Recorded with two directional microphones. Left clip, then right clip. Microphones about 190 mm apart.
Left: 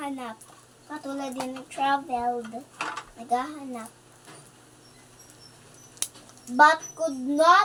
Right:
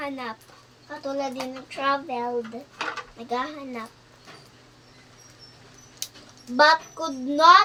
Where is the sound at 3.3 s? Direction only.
20° right (ahead or behind).